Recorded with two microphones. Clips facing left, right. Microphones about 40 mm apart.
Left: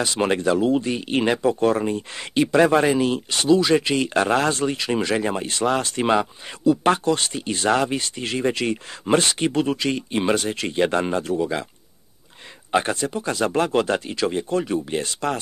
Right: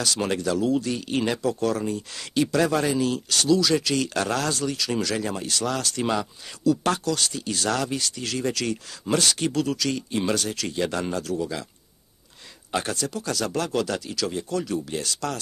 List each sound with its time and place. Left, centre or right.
0.0 s speech: left
12.7 s speech: left